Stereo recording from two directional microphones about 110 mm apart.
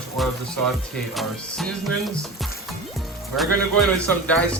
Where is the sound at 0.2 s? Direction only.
Centre (ahead or behind).